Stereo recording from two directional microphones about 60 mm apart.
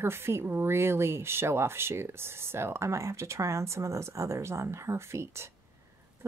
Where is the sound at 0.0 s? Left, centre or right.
Right.